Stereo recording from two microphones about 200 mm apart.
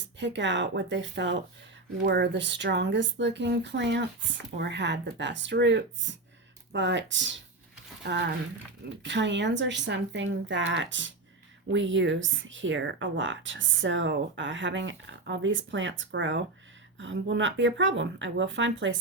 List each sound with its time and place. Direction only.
0.2 s speech: 65° right (ahead or behind)